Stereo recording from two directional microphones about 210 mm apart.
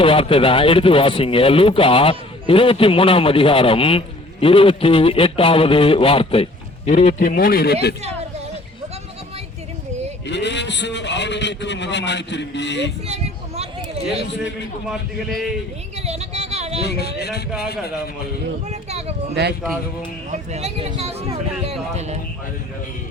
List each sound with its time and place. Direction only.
0.0 s speech: 25° left (ahead or behind); by 7.9 s 50° left (ahead or behind)
10.2 s a man's voice: 55° left (ahead or behind)
13.1 s a sound: 30° right (ahead or behind)
14.8 s a man's voice: centre (ahead or behind)
16.0 s a sound: 30° right (ahead or behind)
16.8 s speech: 50° left (ahead or behind)
18.7 s speech: 30° right (ahead or behind)
19.3 s speech: 55° right (ahead or behind)
20.3 s speech: 30° right (ahead or behind)